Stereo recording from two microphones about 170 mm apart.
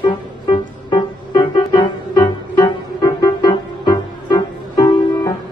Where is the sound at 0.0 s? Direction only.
25° left (ahead or behind).